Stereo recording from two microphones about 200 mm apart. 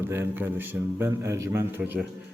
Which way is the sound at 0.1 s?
10° right (ahead or behind).